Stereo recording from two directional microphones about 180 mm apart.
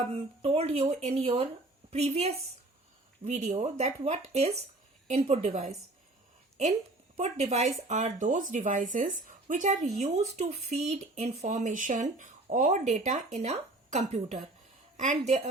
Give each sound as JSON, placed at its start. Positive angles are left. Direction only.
{"t": 0.1, "sound": "speech", "side_deg": -35}
{"t": 7.2, "sound": "a woman's voice", "side_deg": -40}